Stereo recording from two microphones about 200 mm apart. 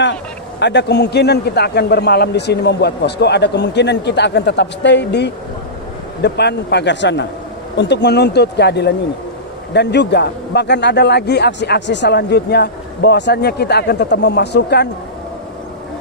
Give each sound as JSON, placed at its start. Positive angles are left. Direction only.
{"t": 0.6, "sound": "a man's voice", "side_deg": 60}